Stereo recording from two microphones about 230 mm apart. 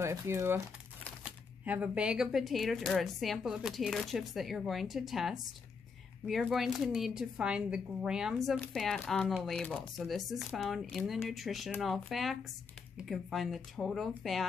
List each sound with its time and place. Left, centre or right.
0.0 s speech: centre
1.6 s speech: centre